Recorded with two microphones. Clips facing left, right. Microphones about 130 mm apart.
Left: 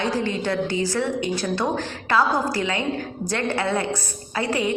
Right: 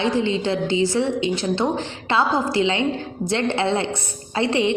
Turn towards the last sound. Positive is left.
turn(degrees=-25)  # may be behind; listen again after turning